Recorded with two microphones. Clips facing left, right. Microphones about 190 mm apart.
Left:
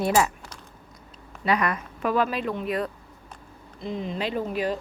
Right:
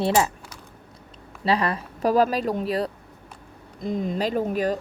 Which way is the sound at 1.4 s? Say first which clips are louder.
Right 1 dB; 30° right (ahead or behind).